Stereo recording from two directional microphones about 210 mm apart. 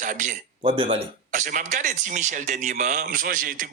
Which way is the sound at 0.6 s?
25° right (ahead or behind).